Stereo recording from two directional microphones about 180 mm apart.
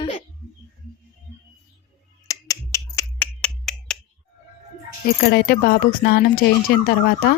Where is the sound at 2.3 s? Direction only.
20° left (ahead or behind).